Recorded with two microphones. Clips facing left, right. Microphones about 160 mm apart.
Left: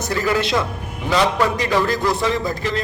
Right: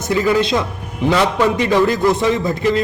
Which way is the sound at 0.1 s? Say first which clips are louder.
Right 5 dB; 20° right (ahead or behind).